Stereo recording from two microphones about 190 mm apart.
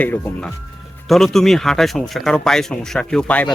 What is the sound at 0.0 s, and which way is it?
Speech, 10° left (ahead or behind).